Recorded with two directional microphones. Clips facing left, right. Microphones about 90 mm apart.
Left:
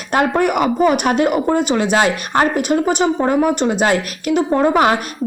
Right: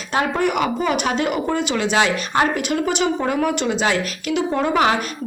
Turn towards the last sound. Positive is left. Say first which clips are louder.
# left 4 dB
turn(degrees=40)  # may be behind; listen again after turning